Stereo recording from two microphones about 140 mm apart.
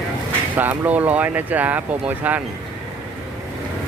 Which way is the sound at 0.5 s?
15° right (ahead or behind).